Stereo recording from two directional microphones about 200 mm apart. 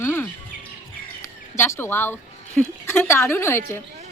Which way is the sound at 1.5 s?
10° left (ahead or behind).